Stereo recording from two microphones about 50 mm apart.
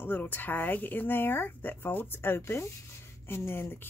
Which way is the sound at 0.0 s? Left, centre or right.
Left.